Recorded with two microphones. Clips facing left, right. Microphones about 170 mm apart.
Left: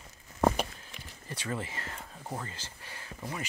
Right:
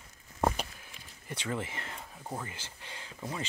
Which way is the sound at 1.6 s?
20° right (ahead or behind).